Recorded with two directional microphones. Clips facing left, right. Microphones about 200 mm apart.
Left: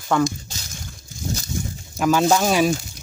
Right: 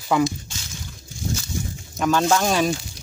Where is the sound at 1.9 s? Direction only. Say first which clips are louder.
Left 2 dB; 5° left (ahead or behind).